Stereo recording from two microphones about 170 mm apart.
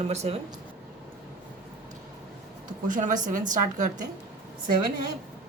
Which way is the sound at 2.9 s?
50° right (ahead or behind).